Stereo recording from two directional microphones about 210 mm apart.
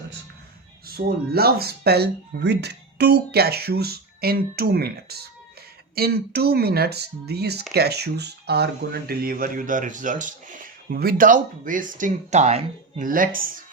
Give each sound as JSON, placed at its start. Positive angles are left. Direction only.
{"t": 0.9, "sound": "speech", "side_deg": -45}